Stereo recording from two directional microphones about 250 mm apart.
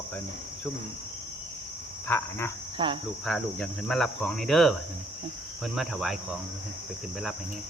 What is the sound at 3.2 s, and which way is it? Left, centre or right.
Cricket, centre.